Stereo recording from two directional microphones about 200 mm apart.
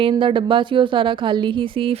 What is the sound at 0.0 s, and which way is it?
A woman's voice, 25° right (ahead or behind).